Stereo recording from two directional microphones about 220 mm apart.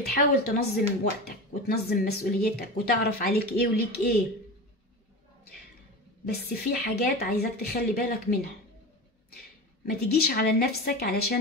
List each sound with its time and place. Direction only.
0.0 s speech: 45° left (ahead or behind)
6.2 s speech: 45° left (ahead or behind)
9.8 s speech: 45° left (ahead or behind)